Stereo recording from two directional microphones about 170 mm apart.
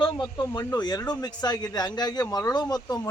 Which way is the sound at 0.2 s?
15° left (ahead or behind).